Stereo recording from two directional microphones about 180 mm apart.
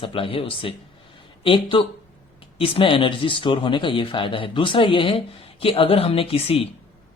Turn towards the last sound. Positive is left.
turn(degrees=30)  # may be behind; listen again after turning